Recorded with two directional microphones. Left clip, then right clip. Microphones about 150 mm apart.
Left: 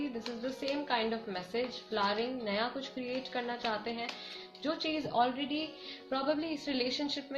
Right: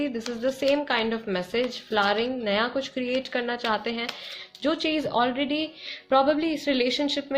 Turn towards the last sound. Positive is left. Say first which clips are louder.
# right 10 dB
turn(degrees=-90)